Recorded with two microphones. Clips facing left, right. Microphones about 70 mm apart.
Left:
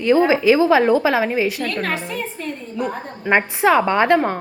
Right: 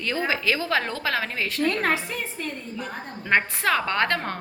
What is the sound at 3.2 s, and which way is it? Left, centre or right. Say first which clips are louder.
A woman's voice: left 6 dB; centre.